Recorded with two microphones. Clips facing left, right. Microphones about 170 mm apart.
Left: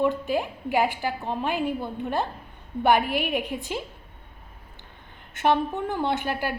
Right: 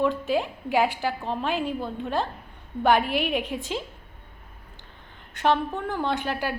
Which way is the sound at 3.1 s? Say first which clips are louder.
Right 1 dB; 50° left (ahead or behind).